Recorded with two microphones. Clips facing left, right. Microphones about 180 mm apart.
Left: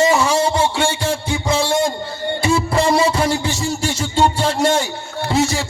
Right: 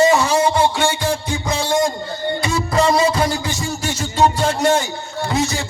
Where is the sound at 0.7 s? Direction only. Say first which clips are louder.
Even; 30° left (ahead or behind).